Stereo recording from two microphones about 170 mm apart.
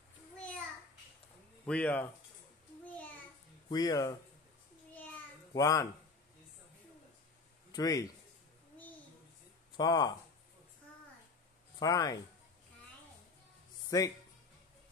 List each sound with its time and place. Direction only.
1.7 s speech: 10° left (ahead or behind)
2.8 s a sound: 10° left (ahead or behind)
3.7 s speech: 20° left (ahead or behind)
5.5 s speech: 20° left (ahead or behind)
7.7 s a man's voice: 20° left (ahead or behind)
9.8 s speech: 25° left (ahead or behind)
11.8 s speech: 20° left (ahead or behind)
13.8 s speech: 20° left (ahead or behind)